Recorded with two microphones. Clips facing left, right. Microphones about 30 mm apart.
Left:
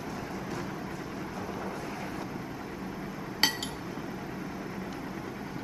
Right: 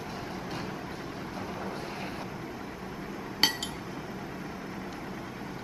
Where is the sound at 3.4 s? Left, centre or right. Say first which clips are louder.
Right 1 dB; centre.